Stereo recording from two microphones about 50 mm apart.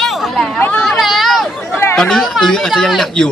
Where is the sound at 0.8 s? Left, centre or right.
Centre.